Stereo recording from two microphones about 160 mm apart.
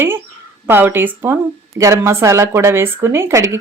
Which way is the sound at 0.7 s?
15° right (ahead or behind).